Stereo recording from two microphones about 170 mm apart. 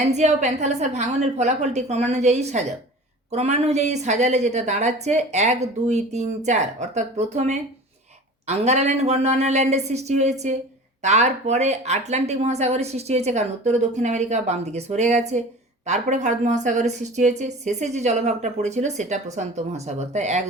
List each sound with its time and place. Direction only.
0.1 s a woman's voice: 45° right (ahead or behind)